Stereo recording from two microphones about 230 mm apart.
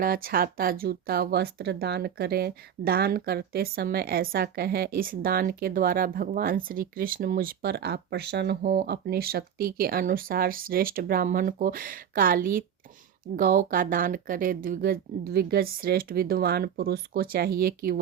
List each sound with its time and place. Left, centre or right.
0.0 s speech: right